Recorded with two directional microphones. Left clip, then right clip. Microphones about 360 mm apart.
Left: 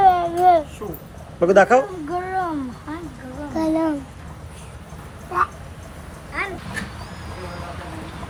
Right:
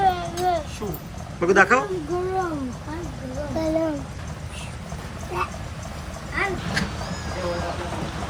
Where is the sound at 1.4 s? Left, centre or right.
Centre.